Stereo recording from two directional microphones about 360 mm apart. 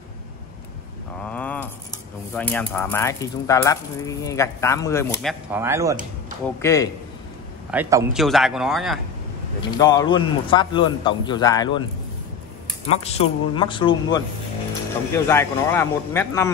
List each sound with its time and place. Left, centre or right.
1.2 s a sound: centre
2.3 s speech: centre
5.5 s speech: centre
6.6 s speech: centre
7.7 s speech: centre
9.6 s speech: centre
12.8 s speech: centre